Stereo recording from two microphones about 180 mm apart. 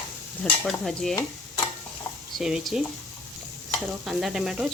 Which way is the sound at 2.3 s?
Centre (ahead or behind).